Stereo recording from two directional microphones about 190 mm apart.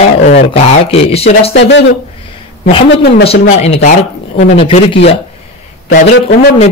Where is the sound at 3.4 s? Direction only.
35° left (ahead or behind).